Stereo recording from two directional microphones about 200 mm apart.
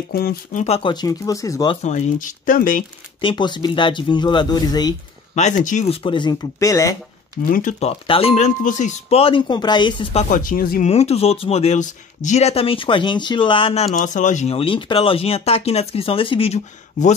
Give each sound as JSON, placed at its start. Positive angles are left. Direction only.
{"t": 0.1, "sound": "speech", "side_deg": 50}
{"t": 1.8, "sound": "speech", "side_deg": 35}
{"t": 3.2, "sound": "speech", "side_deg": 25}
{"t": 5.3, "sound": "speech", "side_deg": 35}
{"t": 6.0, "sound": "speech", "side_deg": 25}
{"t": 7.5, "sound": "speech", "side_deg": 35}
{"t": 10.3, "sound": "speech", "side_deg": 45}
{"t": 10.9, "sound": "speech", "side_deg": 30}
{"t": 14.0, "sound": "speech", "side_deg": 35}